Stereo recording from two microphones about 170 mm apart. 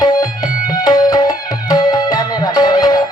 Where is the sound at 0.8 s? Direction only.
25° left (ahead or behind).